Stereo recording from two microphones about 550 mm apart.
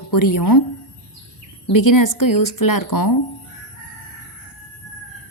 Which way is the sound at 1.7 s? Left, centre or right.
Left.